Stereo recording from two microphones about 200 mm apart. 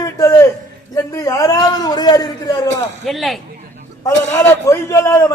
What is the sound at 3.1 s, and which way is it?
Speech, centre (ahead or behind).